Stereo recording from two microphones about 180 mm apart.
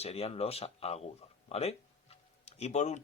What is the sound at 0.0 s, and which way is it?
Speech, 35° left (ahead or behind).